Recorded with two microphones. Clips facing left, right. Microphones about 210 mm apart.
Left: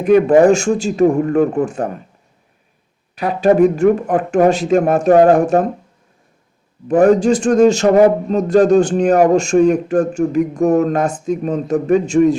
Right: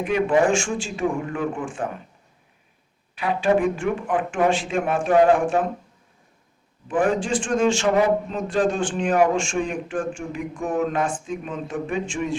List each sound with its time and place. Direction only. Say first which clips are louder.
0.0 s speech: left 10 dB; 40° left (ahead or behind)
3.2 s speech: left 8 dB; 40° left (ahead or behind)
6.8 s speech: left 11 dB; 40° left (ahead or behind)